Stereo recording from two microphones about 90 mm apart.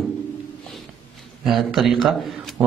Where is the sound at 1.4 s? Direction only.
Centre (ahead or behind).